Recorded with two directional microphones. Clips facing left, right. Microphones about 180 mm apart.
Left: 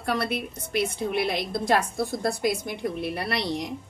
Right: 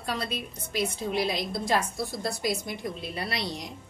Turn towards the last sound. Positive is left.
turn(degrees=60)  # may be behind; listen again after turning